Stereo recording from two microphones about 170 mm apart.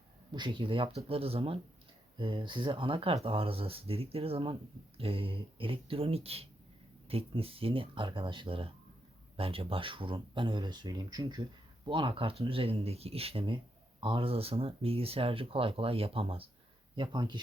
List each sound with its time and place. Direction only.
0.3 s speech: 30° right (ahead or behind)